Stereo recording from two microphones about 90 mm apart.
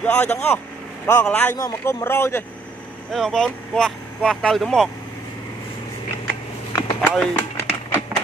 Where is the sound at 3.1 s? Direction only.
5° left (ahead or behind).